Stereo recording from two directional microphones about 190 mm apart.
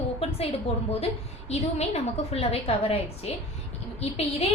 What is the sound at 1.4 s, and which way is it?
A woman's voice, 35° left (ahead or behind).